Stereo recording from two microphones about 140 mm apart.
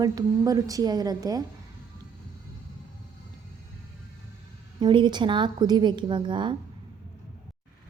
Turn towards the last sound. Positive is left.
turn(degrees=-35)  # may be behind; listen again after turning